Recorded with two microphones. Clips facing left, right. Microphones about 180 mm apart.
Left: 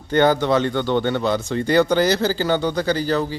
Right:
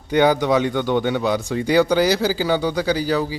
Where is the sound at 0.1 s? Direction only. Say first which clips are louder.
Even; 10° right (ahead or behind).